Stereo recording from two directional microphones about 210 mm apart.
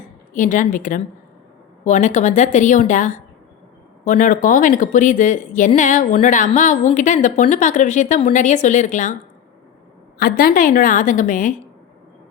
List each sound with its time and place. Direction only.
0.3 s a woman's voice: 35° left (ahead or behind)
10.2 s a woman's voice: 45° left (ahead or behind)